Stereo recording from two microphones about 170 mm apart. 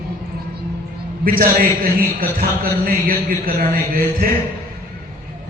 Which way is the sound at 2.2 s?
60° right (ahead or behind).